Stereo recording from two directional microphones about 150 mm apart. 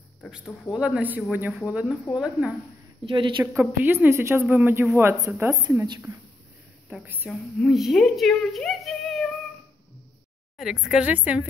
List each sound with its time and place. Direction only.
0.7 s a woman's voice: 5° right (ahead or behind)
3.1 s speech: 35° right (ahead or behind)
3.5 s a woman's voice: 15° right (ahead or behind)
6.9 s a woman's voice: 10° right (ahead or behind)
7.2 s a woman's voice: centre (ahead or behind)
10.6 s a woman's voice: 5° right (ahead or behind)